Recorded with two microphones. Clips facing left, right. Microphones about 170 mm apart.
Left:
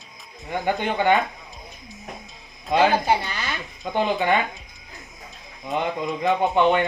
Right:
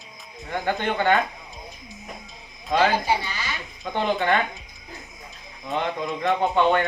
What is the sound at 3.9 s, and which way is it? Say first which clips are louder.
Speech: left 1 dB; 15° left (ahead or behind).